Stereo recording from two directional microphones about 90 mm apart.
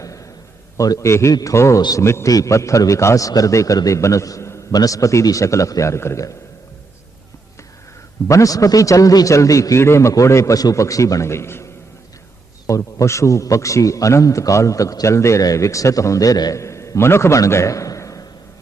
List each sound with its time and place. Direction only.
0.8 s a man's voice: 35° left (ahead or behind)
8.3 s a man's voice: 40° left (ahead or behind)